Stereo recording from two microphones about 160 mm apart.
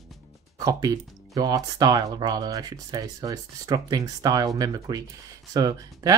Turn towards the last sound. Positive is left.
turn(degrees=-20)  # may be behind; listen again after turning